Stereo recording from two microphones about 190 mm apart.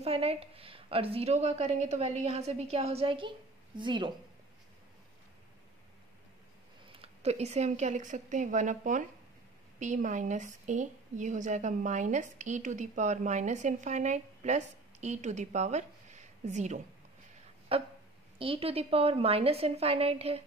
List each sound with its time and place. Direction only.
0.0 s a woman's voice: 30° right (ahead or behind)
6.9 s a woman's voice: 30° right (ahead or behind)